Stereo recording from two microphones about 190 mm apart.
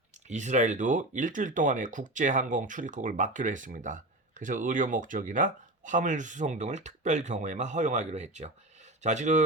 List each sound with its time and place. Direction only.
0.3 s speech: 40° right (ahead or behind)